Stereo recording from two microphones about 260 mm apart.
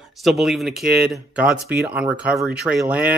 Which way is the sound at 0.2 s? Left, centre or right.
Centre.